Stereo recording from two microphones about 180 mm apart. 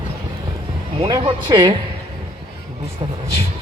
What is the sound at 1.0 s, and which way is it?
Speech, 25° right (ahead or behind).